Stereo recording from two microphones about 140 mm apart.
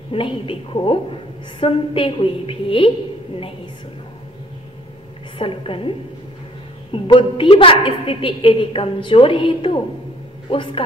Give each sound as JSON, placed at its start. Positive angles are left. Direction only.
{"t": 0.1, "sound": "a woman's voice", "side_deg": 40}
{"t": 5.4, "sound": "a woman's voice", "side_deg": 40}